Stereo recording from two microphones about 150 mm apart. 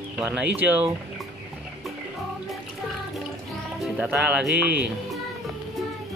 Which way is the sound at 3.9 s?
10° right (ahead or behind).